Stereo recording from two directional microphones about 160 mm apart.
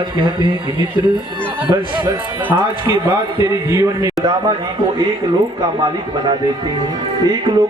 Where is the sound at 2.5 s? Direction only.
25° right (ahead or behind).